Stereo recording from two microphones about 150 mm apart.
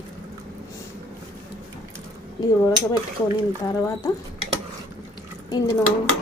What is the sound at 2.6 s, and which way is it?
Speech, 25° left (ahead or behind).